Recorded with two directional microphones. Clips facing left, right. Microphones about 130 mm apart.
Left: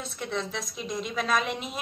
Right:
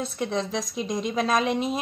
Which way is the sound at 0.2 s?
35° right (ahead or behind).